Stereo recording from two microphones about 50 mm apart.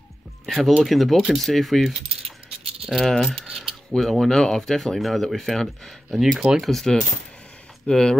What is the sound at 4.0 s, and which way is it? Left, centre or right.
Speech, centre.